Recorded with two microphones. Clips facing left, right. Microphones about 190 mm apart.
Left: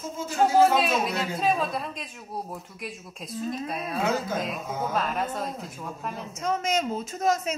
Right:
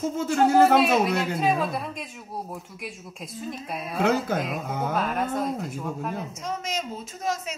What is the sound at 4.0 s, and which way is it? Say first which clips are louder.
Speech: right 4 dB; 65° right (ahead or behind).